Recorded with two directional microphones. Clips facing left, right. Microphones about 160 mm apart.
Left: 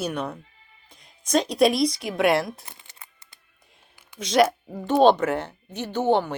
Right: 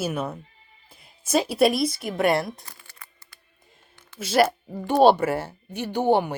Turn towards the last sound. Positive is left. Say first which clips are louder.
# right 1 dB
turn(degrees=-10)  # may be behind; listen again after turning